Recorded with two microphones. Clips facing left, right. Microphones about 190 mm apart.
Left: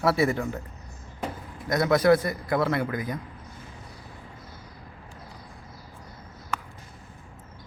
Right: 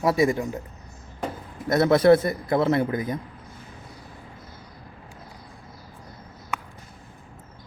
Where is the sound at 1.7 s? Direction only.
30° right (ahead or behind).